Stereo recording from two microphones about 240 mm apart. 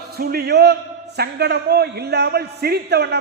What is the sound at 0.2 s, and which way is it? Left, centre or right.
A man's voice, right.